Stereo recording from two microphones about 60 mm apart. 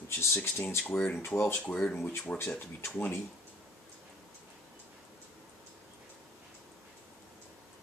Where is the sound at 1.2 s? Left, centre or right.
Left.